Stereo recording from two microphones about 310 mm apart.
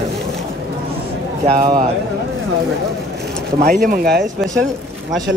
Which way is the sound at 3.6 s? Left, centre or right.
Right.